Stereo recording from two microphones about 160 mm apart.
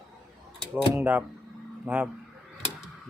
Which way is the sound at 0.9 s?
10° right (ahead or behind).